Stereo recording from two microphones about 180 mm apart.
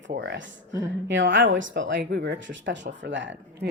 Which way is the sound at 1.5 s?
90° right.